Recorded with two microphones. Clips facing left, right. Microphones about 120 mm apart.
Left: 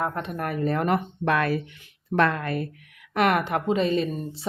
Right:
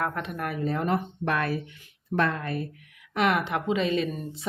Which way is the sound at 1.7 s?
80° left.